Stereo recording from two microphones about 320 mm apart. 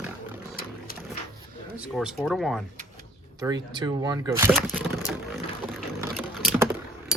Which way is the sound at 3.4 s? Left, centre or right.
Centre.